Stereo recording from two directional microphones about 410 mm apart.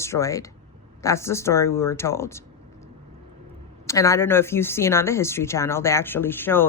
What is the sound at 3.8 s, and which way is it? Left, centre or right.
Speech, centre.